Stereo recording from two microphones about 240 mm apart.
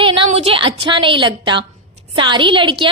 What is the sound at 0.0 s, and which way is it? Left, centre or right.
A woman's voice, right.